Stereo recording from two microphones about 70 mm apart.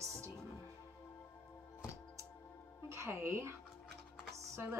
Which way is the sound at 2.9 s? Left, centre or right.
Right.